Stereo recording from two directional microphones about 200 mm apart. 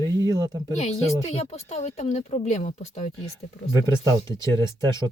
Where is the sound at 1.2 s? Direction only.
30° left (ahead or behind).